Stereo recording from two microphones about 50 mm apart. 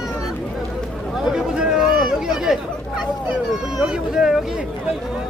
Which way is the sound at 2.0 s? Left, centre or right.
Centre.